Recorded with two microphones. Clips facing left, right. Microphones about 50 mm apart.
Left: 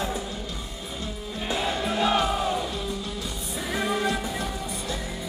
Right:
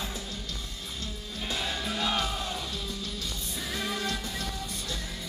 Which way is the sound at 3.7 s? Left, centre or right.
Centre.